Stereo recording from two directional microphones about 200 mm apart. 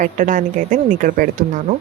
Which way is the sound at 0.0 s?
40° right (ahead or behind).